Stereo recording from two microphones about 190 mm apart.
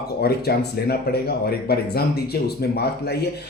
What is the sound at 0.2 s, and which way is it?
Speech, 55° left (ahead or behind).